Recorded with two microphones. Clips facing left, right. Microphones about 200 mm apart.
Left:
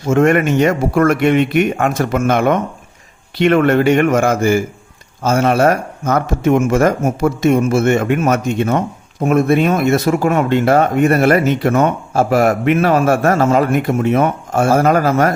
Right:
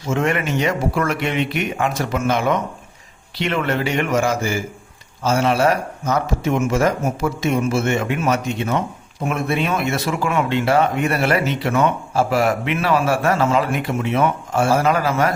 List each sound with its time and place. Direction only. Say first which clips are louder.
0.0 s speech: left 8 dB; 50° left (ahead or behind)